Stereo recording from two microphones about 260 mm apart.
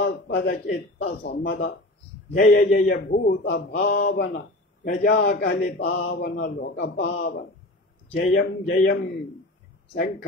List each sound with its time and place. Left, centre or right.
0.0 s speech: left